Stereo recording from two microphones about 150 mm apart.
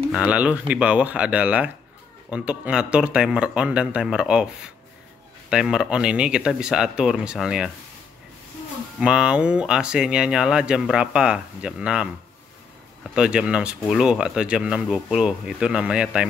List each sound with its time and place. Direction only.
0.1 s speech: 5° right (ahead or behind)
5.5 s speech: 5° right (ahead or behind)
9.0 s speech: 5° right (ahead or behind)
13.1 s speech: 5° right (ahead or behind)